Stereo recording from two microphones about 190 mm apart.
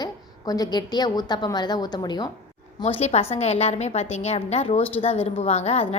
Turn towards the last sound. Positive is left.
turn(degrees=35)  # may be behind; listen again after turning